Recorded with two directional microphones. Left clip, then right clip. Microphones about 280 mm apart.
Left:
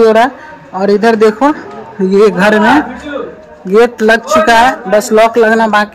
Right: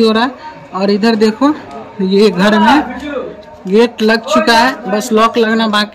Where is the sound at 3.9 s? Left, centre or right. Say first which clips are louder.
Left 3 dB; centre.